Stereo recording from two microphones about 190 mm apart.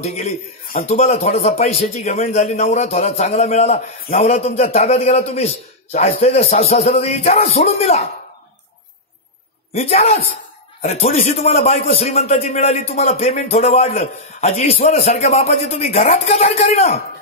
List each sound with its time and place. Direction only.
0.0 s a man's voice: 35° left (ahead or behind)
9.7 s a man's voice: 35° left (ahead or behind)